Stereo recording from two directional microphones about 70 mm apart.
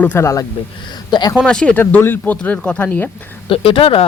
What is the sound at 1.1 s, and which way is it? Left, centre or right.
Speech, left.